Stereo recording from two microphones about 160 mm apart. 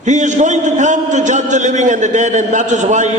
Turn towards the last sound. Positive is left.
turn(degrees=-50)  # may be behind; listen again after turning